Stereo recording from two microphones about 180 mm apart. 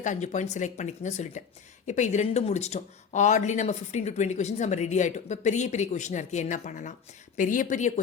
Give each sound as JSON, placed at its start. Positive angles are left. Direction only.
{"t": 0.0, "sound": "speech", "side_deg": 40}